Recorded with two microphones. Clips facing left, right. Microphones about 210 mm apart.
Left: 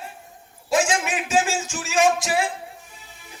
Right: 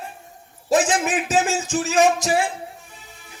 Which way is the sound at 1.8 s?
35° right (ahead or behind).